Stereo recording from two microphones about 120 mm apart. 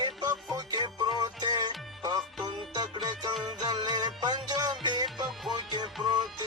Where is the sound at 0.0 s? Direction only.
35° right (ahead or behind).